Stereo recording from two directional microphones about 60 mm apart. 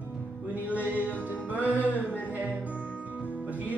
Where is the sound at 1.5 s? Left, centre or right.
Right.